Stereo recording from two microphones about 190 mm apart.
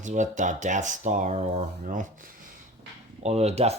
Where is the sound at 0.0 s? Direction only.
40° right (ahead or behind).